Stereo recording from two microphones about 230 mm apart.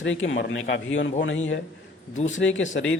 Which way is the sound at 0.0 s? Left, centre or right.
Left.